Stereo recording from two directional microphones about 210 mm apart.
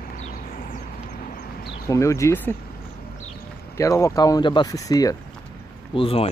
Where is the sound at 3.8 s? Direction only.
15° left (ahead or behind).